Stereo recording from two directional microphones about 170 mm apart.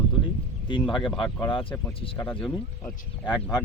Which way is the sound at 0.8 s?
Centre (ahead or behind).